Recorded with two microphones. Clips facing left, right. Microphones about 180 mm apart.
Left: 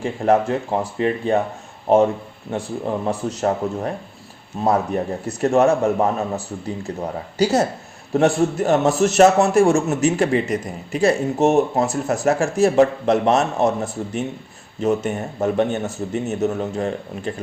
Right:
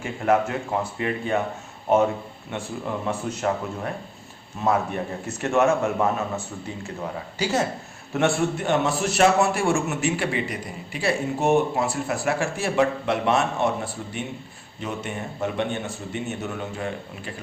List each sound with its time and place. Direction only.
0.0 s a man's voice: 35° left (ahead or behind)
2.5 s a man's voice: 35° left (ahead or behind)